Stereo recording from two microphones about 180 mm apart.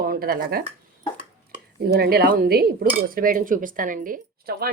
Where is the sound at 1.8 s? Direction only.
60° right (ahead or behind).